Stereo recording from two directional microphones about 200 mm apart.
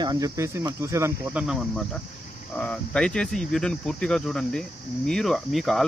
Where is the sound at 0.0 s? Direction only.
20° right (ahead or behind).